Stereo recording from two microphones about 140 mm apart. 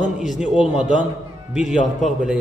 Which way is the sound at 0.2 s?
5° right (ahead or behind).